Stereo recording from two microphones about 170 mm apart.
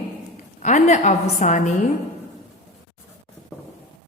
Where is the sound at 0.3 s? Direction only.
45° left (ahead or behind).